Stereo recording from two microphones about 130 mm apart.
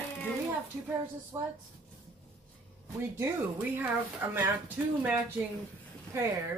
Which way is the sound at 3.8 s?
15° right (ahead or behind).